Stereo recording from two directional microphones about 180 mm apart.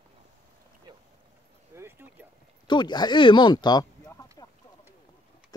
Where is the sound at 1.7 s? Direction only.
10° right (ahead or behind).